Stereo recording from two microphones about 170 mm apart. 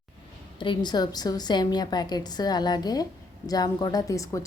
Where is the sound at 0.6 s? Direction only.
25° left (ahead or behind).